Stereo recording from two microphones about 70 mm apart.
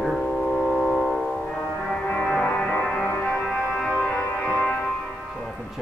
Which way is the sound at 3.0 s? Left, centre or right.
Left.